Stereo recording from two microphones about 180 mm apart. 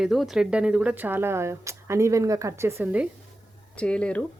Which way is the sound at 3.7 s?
5° left (ahead or behind).